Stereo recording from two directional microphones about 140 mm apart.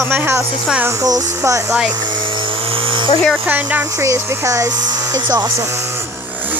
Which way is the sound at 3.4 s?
10° right (ahead or behind).